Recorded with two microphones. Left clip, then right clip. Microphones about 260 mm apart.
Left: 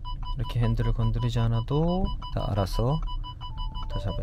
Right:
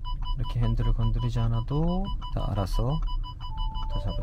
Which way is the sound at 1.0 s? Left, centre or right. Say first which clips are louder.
Left 2 dB; centre.